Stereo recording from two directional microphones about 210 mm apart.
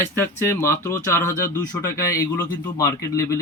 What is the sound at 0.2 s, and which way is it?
Speech, 10° left (ahead or behind).